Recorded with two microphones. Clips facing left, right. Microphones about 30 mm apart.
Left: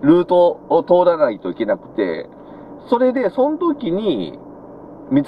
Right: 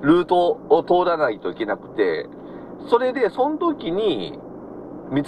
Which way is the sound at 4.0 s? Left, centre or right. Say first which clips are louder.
Left 2 dB; right.